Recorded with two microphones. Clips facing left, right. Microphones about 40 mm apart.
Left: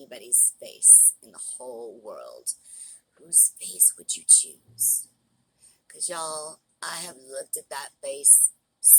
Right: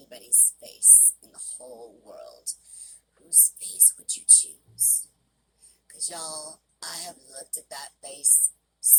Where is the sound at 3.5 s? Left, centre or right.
Left.